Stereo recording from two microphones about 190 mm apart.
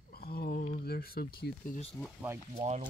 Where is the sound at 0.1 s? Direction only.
55° left (ahead or behind).